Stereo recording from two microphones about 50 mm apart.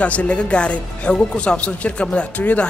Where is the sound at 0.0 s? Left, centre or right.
Left.